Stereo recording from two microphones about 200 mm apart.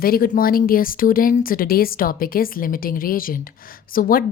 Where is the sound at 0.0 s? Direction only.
45° left (ahead or behind).